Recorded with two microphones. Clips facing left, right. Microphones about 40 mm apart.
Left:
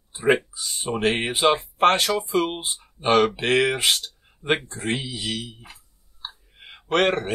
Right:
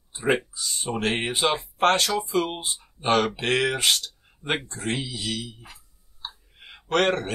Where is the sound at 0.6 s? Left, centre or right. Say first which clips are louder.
Left 2 dB; centre.